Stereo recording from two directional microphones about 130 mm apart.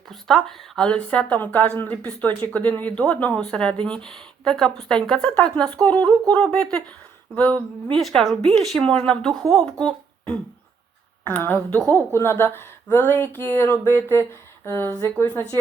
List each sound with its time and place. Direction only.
0.1 s a woman's voice: centre (ahead or behind); by 15.4 s 15° left (ahead or behind)